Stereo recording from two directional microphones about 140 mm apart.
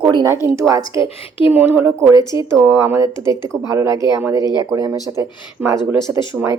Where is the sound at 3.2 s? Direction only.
35° left (ahead or behind).